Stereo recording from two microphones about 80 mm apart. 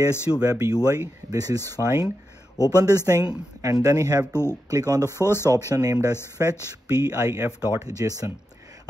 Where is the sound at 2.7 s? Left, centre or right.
Right.